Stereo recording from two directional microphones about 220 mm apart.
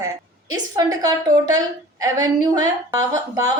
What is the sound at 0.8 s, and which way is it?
A woman's voice, 15° right (ahead or behind).